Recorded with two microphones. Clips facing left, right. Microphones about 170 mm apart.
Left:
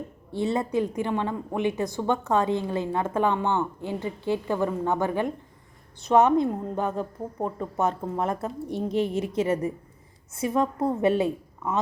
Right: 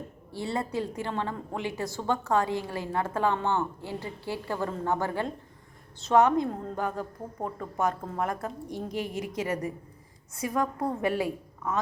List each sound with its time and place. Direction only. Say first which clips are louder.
0.3 s speech: left 6 dB; 20° left (ahead or behind)